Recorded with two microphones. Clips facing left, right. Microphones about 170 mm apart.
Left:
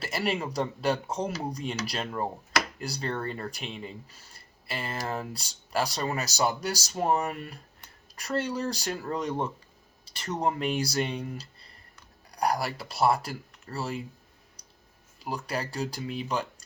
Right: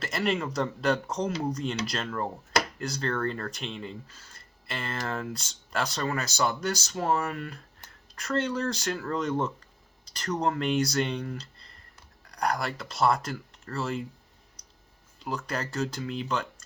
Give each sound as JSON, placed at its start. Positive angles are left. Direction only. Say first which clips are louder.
{"t": 0.0, "sound": "speech", "louder": "right 1 dB", "side_deg": 5}
{"t": 15.2, "sound": "speech", "louder": "even", "side_deg": 10}